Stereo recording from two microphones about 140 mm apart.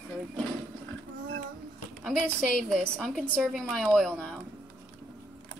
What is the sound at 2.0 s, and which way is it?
A woman's voice, 5° left (ahead or behind).